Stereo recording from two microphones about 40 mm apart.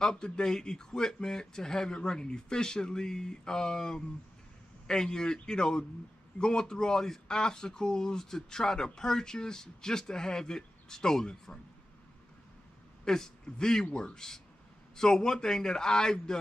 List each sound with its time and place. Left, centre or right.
0.0 s speech: centre
13.0 s a man's voice: centre